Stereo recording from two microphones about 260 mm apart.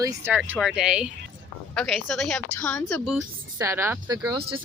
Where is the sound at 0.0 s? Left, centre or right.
Centre.